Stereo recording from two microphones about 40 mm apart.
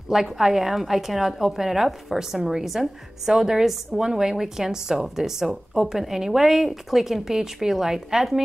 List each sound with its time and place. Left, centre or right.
0.1 s a woman's voice: centre